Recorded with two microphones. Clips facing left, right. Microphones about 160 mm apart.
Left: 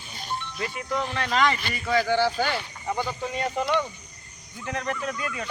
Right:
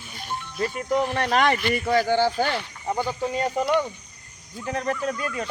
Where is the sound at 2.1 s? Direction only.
15° right (ahead or behind).